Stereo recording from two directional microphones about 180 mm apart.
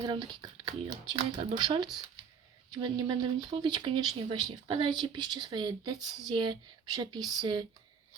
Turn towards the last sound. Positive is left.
turn(degrees=-25)  # may be behind; listen again after turning